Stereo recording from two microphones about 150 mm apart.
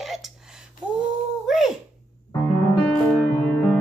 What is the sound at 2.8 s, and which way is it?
Music, 10° left (ahead or behind).